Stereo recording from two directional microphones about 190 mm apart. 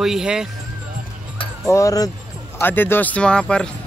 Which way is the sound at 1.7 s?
20° left (ahead or behind).